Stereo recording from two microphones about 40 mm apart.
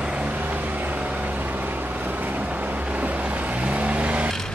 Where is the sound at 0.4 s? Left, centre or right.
Right.